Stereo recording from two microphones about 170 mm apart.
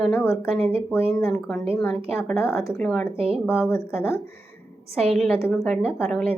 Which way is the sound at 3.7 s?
15° left (ahead or behind).